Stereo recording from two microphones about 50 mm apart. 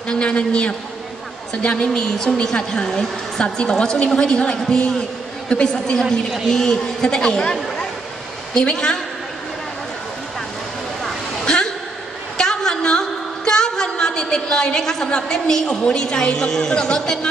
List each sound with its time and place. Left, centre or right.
0.1 s a woman's voice: left
8.5 s a woman's voice: centre
11.4 s a sound: centre
15.0 s a woman's voice: centre